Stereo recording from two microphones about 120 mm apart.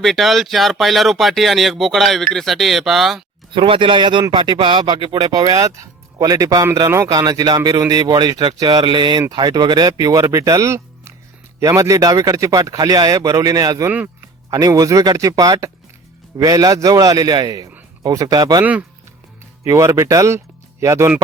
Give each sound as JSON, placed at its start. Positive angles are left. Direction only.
{"t": 0.0, "sound": "speech", "side_deg": 0}
{"t": 3.5, "sound": "a man's voice", "side_deg": -45}
{"t": 18.6, "sound": "speech", "side_deg": -10}
{"t": 19.6, "sound": "a man's voice", "side_deg": -25}